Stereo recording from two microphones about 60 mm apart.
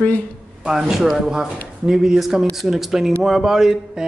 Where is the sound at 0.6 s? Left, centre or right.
Centre.